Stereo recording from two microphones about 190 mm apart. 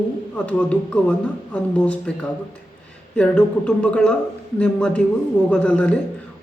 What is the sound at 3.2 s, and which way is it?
A man's voice, 5° left (ahead or behind).